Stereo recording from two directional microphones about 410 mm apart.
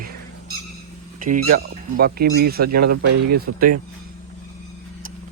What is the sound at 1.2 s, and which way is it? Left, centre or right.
Speech, centre.